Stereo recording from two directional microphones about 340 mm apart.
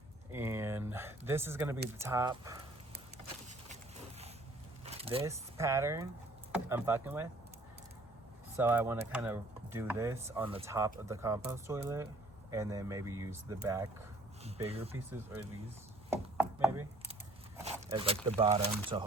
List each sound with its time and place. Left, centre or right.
0.3 s a sound: centre
1.3 s speech: centre
4.9 s speech: centre
8.5 s speech: centre
14.4 s a sound: centre
16.0 s chopping: centre
17.6 s speech: centre